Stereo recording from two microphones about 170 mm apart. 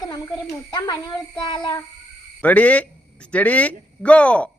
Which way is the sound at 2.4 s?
10° left (ahead or behind).